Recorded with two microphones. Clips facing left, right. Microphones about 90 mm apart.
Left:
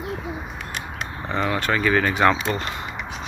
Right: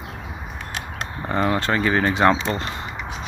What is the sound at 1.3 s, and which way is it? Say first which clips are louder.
Speech: right 2 dB; 35° right (ahead or behind).